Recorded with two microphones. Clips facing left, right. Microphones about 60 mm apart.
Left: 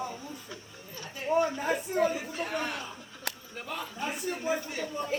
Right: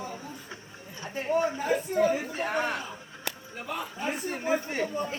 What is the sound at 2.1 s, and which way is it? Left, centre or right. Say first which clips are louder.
Speech: right 4 dB; right.